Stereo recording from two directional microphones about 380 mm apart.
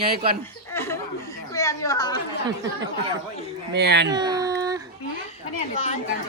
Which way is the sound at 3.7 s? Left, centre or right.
Right.